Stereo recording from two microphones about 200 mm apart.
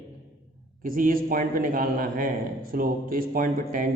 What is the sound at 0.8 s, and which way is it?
A man's voice, 45° right (ahead or behind).